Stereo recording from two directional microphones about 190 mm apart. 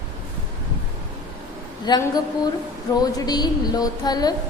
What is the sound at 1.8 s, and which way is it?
A woman's voice, 20° left (ahead or behind).